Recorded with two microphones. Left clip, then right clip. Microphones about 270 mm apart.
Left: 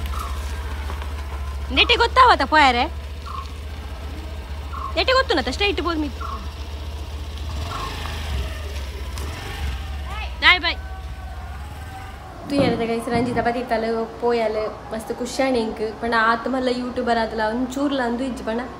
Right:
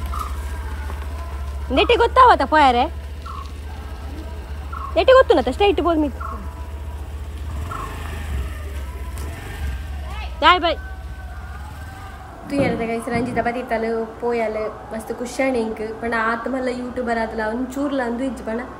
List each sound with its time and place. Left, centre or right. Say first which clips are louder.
1.7 s a woman's voice: right 1 dB; centre
4.9 s a woman's voice: right 6 dB; centre
7.6 s vehicle: left 1 dB; centre
10.1 s vehicle: right 1 dB; centre
12.4 s a woman's voice: left 1 dB; centre